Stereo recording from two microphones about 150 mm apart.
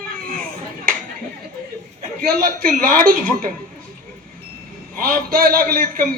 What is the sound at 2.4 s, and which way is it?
A man's voice, 70° right (ahead or behind).